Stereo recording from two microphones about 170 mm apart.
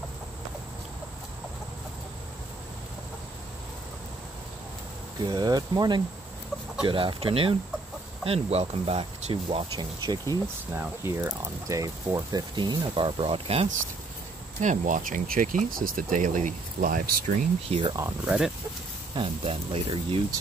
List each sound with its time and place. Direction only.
5.2 s speech: 25° right (ahead or behind)
14.6 s speech: 45° right (ahead or behind)
17.6 s speech: 30° right (ahead or behind)
18.2 s speech: 5° right (ahead or behind)
19.1 s speech: 30° right (ahead or behind)